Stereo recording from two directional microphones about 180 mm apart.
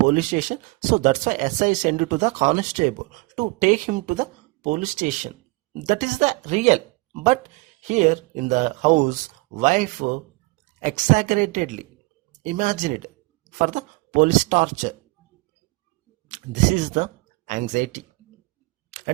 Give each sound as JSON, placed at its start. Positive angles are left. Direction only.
{"t": 0.1, "sound": "speech", "side_deg": -45}
{"t": 16.3, "sound": "speech", "side_deg": -45}
{"t": 18.9, "sound": "tick-tock", "side_deg": -45}